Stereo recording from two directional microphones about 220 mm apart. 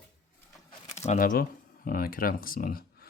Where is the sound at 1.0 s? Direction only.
35° left (ahead or behind).